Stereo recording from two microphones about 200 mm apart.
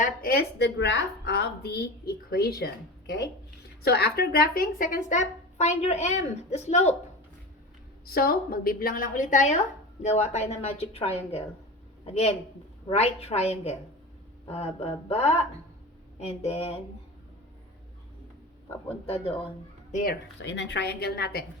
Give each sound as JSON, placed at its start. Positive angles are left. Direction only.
{"t": 0.0, "sound": "a woman's voice", "side_deg": 45}
{"t": 8.0, "sound": "a woman's voice", "side_deg": 50}
{"t": 12.9, "sound": "speech", "side_deg": 30}
{"t": 18.9, "sound": "speech", "side_deg": 30}
{"t": 19.9, "sound": "speech", "side_deg": 40}
{"t": 20.4, "sound": "a woman's voice", "side_deg": 60}